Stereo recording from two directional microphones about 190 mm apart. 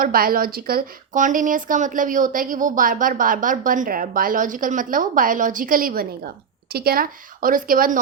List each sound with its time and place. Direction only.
0.0 s a woman's voice: 50° right (ahead or behind)